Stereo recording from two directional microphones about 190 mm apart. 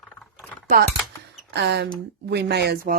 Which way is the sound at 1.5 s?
65° right (ahead or behind).